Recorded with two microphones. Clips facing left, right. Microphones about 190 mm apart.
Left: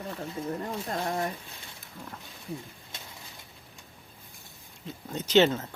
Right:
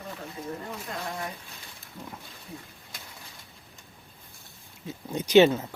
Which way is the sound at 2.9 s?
25° left (ahead or behind).